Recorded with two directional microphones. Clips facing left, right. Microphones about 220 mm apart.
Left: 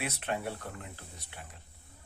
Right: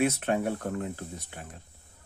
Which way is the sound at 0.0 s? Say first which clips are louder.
Right 9 dB; 50° right (ahead or behind).